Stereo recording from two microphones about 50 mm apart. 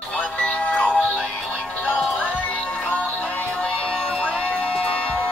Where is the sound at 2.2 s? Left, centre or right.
Left.